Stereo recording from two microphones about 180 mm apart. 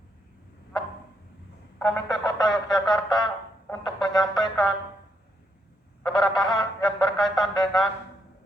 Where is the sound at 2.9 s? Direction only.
25° left (ahead or behind).